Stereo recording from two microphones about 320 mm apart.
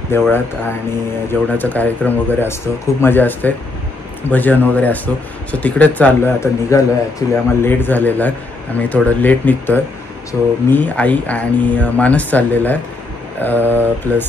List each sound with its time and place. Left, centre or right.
0.1 s speech: centre